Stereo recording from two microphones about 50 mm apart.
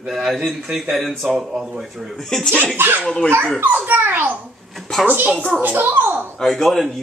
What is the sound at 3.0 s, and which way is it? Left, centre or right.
Speech, centre.